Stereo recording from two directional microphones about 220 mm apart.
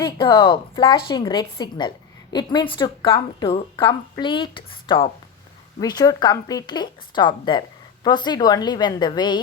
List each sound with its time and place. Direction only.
0.0 s a woman's voice: 20° left (ahead or behind)